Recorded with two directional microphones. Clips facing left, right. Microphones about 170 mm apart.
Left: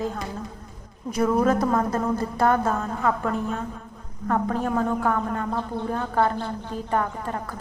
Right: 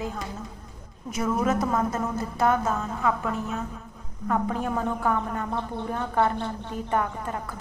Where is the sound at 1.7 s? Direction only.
50° left (ahead or behind).